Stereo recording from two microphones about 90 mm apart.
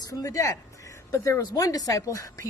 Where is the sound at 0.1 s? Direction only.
40° left (ahead or behind).